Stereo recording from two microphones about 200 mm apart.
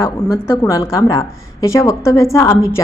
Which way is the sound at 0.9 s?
15° left (ahead or behind).